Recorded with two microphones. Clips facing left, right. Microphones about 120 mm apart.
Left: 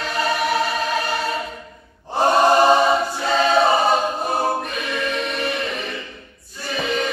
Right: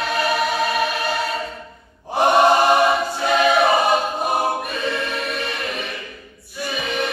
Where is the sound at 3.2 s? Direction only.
15° right (ahead or behind).